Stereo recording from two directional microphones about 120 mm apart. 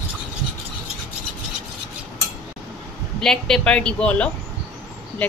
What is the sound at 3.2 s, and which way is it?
Speech, 5° left (ahead or behind).